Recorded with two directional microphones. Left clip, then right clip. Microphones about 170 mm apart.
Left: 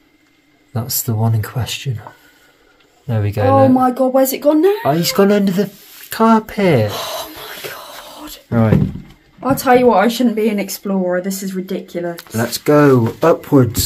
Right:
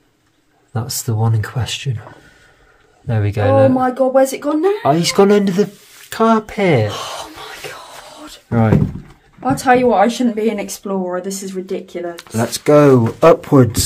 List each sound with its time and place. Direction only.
0.7 s speech: 5° right (ahead or behind)
3.1 s speech: 10° right (ahead or behind)
3.8 s speech: 35° left (ahead or behind)
4.8 s speech: 10° right (ahead or behind)
6.0 s speech: centre (ahead or behind)
8.5 s speech: 10° right (ahead or behind)
9.4 s speech: 50° left (ahead or behind)
12.2 s speech: 5° right (ahead or behind); by 13.8 s 25° right (ahead or behind)